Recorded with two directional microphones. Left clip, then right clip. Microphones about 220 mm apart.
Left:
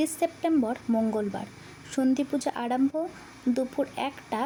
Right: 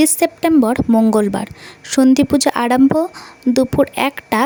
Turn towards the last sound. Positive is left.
turn(degrees=-45)  # may be behind; listen again after turning